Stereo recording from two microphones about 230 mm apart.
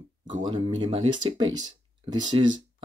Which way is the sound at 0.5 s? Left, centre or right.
Right.